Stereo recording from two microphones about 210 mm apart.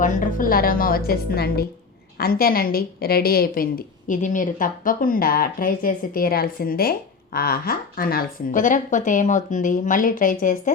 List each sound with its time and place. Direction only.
0.0 s a woman's voice: 40° left (ahead or behind)